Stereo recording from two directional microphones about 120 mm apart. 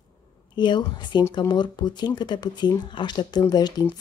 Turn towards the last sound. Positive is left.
turn(degrees=35)  # may be behind; listen again after turning